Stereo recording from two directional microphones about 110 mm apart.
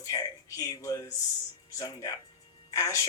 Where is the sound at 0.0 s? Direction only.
30° left (ahead or behind).